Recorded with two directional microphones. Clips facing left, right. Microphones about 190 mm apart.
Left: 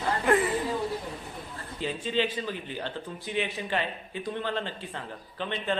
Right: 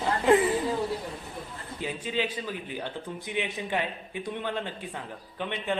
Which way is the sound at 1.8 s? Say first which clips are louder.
Left 2 dB; 10° right (ahead or behind).